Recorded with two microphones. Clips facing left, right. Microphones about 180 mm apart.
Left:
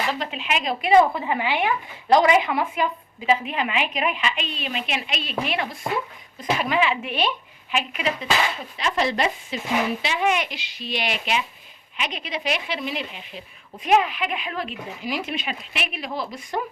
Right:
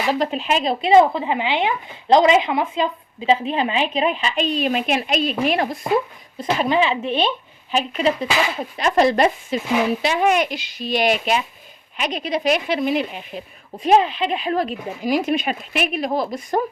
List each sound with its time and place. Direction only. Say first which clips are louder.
0.1 s speech: right 7 dB; 40° right (ahead or behind)
6.4 s a woman's voice: right 4 dB; 30° right (ahead or behind)
8.8 s speech: right 7 dB; 45° right (ahead or behind)
13.8 s speech: right 4 dB; 30° right (ahead or behind)